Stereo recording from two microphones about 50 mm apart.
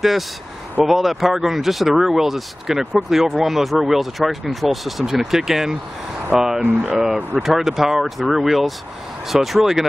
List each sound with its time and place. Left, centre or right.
0.8 s speech: centre
6.6 s speech: right
7.4 s speech: centre